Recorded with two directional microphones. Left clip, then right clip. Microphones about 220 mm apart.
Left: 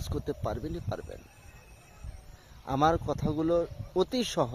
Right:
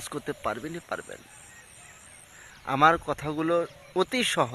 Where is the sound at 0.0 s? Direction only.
15° right (ahead or behind).